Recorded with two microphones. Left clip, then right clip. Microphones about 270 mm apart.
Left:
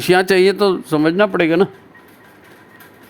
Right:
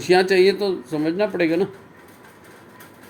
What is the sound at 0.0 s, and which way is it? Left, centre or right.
Speech, left.